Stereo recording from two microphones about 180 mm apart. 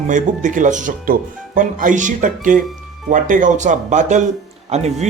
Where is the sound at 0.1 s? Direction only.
45° right (ahead or behind).